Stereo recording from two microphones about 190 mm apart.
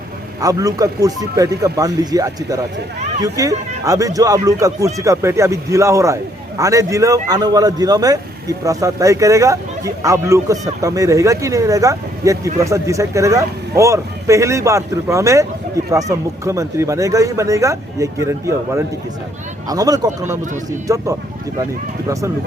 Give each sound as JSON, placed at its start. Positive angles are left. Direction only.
{"t": 0.4, "sound": "speech", "side_deg": -20}